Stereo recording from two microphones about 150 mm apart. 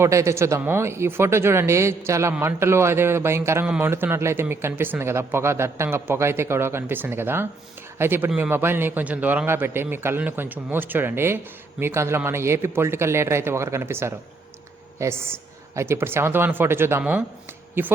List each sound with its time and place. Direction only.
0.0 s speech: 20° right (ahead or behind)